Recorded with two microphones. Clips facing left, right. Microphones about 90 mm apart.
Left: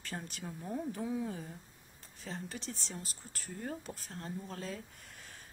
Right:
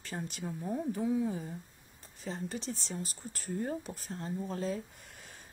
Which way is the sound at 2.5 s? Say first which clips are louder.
Right 5 dB; 25° right (ahead or behind).